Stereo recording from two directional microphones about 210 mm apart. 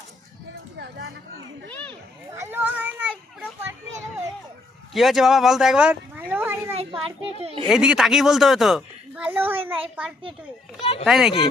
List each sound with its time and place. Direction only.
0.8 s chatter: 55° right (ahead or behind)
2.3 s children playing: 10° right (ahead or behind)
4.9 s speech: centre (ahead or behind)
6.7 s children playing: 30° right (ahead or behind)
7.7 s speech: 5° right (ahead or behind)
11.0 s speech: centre (ahead or behind)